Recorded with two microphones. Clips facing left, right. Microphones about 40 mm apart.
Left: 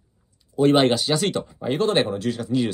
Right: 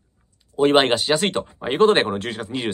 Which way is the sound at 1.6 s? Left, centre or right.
Right.